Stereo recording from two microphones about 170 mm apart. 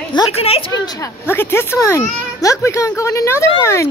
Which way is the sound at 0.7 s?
25° left (ahead or behind).